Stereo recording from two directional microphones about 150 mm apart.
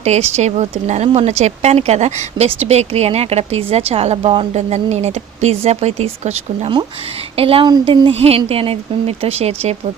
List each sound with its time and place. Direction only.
0.0 s speech: 50° right (ahead or behind)